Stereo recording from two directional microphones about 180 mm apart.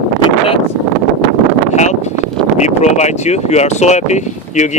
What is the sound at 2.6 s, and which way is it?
Speech, 40° left (ahead or behind).